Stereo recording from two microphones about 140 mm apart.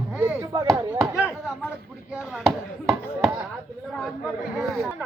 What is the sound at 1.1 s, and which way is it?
Speech, 10° right (ahead or behind).